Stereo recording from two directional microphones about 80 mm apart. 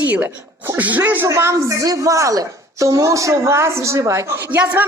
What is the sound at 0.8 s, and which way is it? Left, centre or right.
Speech, right.